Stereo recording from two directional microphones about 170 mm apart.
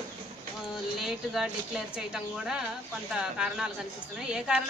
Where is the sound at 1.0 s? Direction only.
5° right (ahead or behind).